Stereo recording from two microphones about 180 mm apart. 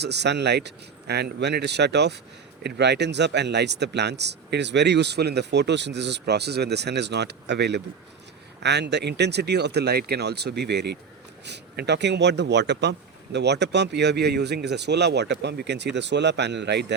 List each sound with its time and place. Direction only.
0.0 s speech: 70° right (ahead or behind)